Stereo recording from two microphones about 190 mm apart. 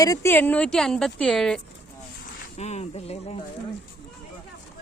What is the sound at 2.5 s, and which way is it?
Speech, 35° left (ahead or behind).